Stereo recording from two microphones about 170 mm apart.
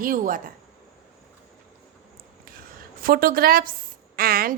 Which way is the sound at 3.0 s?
60° right (ahead or behind).